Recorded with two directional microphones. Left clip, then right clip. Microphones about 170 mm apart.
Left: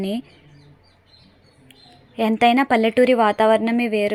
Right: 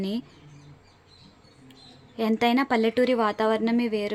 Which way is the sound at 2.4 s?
15° left (ahead or behind).